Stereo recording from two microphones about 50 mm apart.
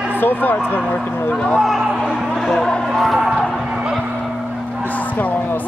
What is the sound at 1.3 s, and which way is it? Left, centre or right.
Speech, left.